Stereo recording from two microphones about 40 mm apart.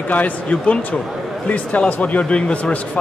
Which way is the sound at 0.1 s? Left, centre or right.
Left.